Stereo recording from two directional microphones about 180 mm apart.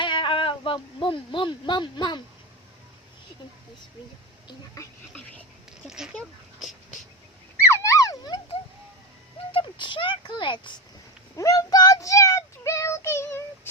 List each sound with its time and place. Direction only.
0.0 s speech: 25° left (ahead or behind)
4.4 s speech: 20° left (ahead or behind)
5.9 s speech: 5° right (ahead or behind)
7.7 s dog: 15° left (ahead or behind)
9.5 s speech: 30° left (ahead or behind)
11.3 s child singing: 20° left (ahead or behind)